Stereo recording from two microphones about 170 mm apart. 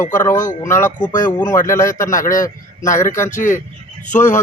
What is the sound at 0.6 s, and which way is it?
A man's voice, 15° left (ahead or behind).